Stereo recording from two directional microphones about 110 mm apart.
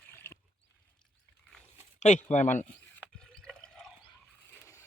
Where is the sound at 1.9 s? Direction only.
90° left.